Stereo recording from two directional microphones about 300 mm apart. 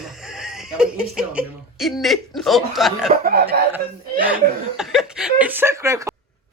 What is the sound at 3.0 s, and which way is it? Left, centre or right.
Speech, right.